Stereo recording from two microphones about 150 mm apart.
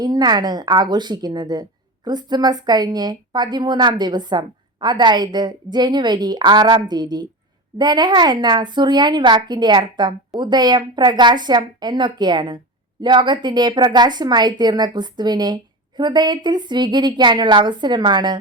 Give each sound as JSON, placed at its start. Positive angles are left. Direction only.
{"t": 0.0, "sound": "a woman's voice", "side_deg": -25}